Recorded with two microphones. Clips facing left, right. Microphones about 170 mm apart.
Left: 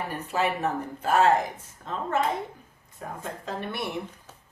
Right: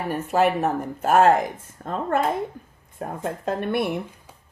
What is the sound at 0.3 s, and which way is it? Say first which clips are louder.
Speech: right 6 dB; 50° right (ahead or behind).